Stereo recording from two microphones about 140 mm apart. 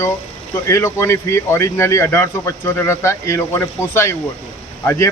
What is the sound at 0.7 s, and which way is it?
A man's voice, 20° left (ahead or behind).